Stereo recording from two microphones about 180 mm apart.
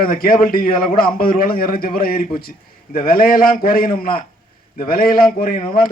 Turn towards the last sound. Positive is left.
turn(degrees=50)  # may be behind; listen again after turning